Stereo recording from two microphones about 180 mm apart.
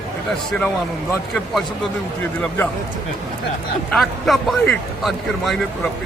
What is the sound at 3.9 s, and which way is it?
A man's voice, centre (ahead or behind).